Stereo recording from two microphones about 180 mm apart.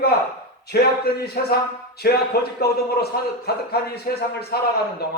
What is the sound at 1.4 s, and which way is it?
Speech, 55° left (ahead or behind).